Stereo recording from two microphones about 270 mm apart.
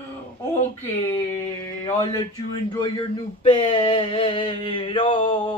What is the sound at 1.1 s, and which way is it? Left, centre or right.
Speech, centre.